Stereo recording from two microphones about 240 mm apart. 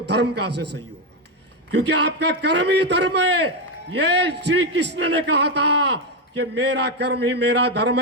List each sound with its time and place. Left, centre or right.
0.0 s a man's voice: right
1.7 s a man's voice: right